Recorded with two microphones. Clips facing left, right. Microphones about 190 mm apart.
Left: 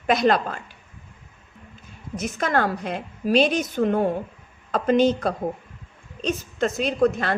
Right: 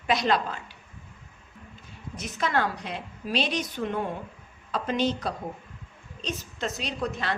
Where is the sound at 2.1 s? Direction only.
50° left (ahead or behind).